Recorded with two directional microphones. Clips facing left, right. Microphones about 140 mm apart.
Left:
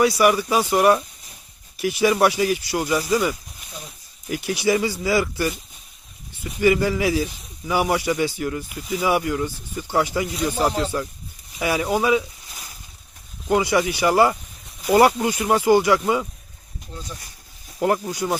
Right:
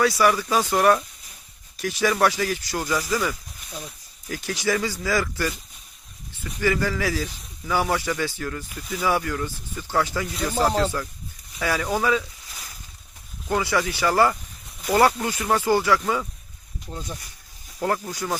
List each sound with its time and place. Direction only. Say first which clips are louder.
0.0 s speech: left 3 dB; 15° left (ahead or behind)
13.5 s speech: left 4 dB; 15° left (ahead or behind)
17.7 s speech: left 4 dB; 20° left (ahead or behind)